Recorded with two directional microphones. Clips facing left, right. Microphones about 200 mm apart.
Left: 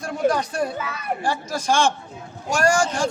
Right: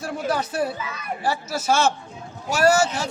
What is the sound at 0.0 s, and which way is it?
A man's voice, 5° right (ahead or behind).